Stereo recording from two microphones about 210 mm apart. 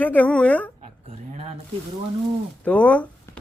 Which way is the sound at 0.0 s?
10° left (ahead or behind).